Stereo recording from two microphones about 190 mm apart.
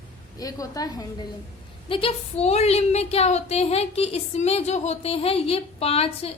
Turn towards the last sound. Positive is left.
turn(degrees=30)  # may be behind; listen again after turning